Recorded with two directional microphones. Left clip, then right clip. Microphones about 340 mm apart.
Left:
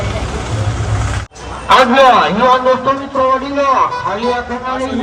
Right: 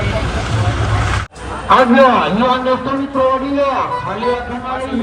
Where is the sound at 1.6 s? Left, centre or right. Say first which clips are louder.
Left 2 dB; left.